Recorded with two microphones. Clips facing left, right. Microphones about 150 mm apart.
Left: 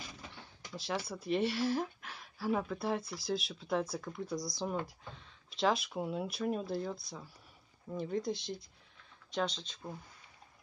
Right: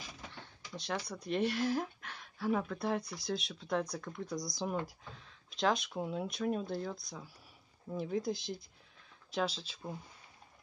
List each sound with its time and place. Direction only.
0.7 s speech: 5° left (ahead or behind)